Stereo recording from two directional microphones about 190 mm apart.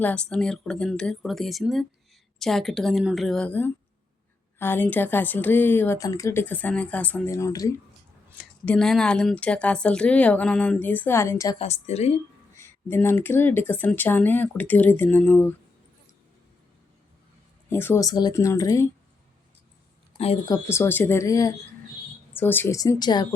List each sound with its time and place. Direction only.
0.0 s a woman's voice: 5° left (ahead or behind)
8.6 s a woman's voice: 5° left (ahead or behind)
11.6 s a woman's voice: 35° left (ahead or behind)
12.5 s speech: 15° left (ahead or behind)
17.7 s speech: 10° left (ahead or behind)
20.1 s speech: 30° left (ahead or behind)
20.5 s speech: 15° left (ahead or behind)